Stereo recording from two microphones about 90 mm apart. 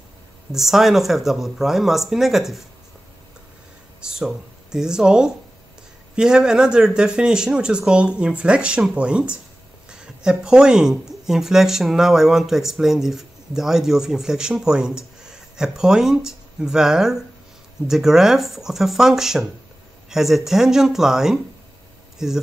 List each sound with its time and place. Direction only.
0.5 s speech: 5° right (ahead or behind)
4.0 s speech: 5° right (ahead or behind)